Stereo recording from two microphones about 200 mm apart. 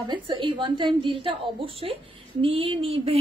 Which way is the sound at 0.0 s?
20° right (ahead or behind).